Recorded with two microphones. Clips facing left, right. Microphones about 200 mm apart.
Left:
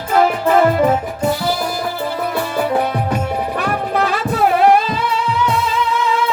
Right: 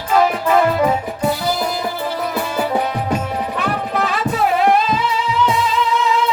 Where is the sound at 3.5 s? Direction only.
60° left (ahead or behind).